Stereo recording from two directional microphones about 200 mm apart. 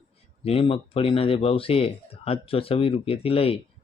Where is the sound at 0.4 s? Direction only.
30° left (ahead or behind).